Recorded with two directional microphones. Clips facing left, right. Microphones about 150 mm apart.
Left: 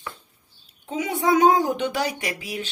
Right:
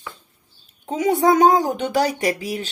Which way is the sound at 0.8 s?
40° right (ahead or behind).